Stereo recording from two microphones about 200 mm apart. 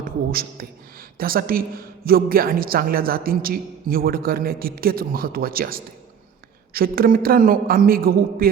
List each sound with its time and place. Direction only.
0.0 s a woman's voice: 50° right (ahead or behind)